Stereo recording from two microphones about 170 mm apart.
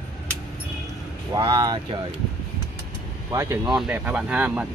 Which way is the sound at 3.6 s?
5° right (ahead or behind).